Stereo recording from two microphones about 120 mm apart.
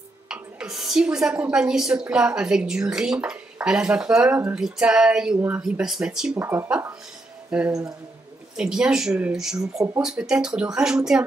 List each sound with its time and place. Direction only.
0.3 s a woman's voice: 5° right (ahead or behind)
4.6 s a sound: 5° right (ahead or behind)
5.6 s a woman's voice: 5° right (ahead or behind)
6.3 s speech: 20° right (ahead or behind)
7.5 s a woman's voice: 5° right (ahead or behind)